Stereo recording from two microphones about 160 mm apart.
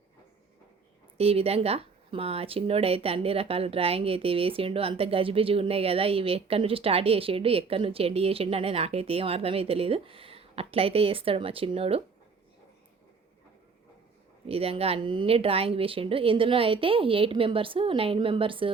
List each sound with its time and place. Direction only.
1.2 s speech: 40° right (ahead or behind)
14.4 s speech: 35° right (ahead or behind)